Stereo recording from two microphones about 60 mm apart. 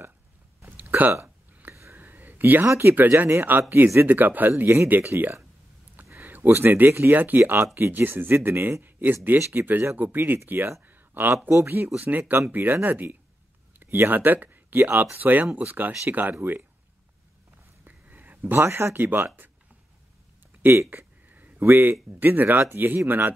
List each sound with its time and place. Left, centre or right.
0.7 s hiccup: right
1.6 s whispering: right
2.0 s a sound: right
2.6 s speech: right
3.4 s speech: right
10.9 s a sound: right
11.5 s speech: right
17.8 s a sound: right
18.9 s speech: right
20.6 s speech: right
20.9 s a sound: right
22.2 s speech: right